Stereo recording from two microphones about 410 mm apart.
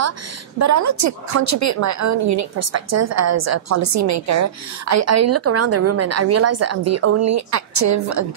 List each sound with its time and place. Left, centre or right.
0.6 s a woman's voice: right